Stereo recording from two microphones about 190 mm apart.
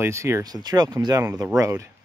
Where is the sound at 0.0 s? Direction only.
15° right (ahead or behind).